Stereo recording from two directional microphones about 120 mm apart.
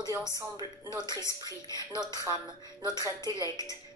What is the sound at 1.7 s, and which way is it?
Speech, 35° right (ahead or behind).